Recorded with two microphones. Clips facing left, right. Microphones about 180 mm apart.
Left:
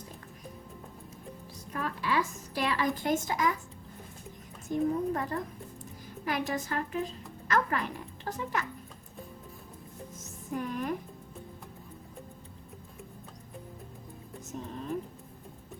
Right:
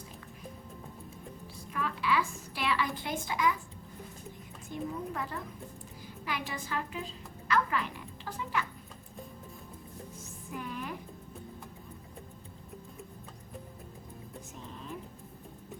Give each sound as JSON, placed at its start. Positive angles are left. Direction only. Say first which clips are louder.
{"t": 1.7, "sound": "a woman's voice", "louder": "even", "side_deg": 40}
{"t": 4.7, "sound": "a woman's voice", "louder": "left 8 dB", "side_deg": 40}
{"t": 10.5, "sound": "a woman's voice", "louder": "left 6 dB", "side_deg": 40}